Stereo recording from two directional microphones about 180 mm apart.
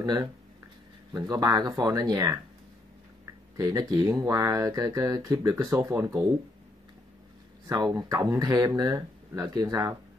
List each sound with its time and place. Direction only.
0.0 s speech: 20° right (ahead or behind)
3.5 s speech: 20° right (ahead or behind)
7.6 s speech: 20° right (ahead or behind)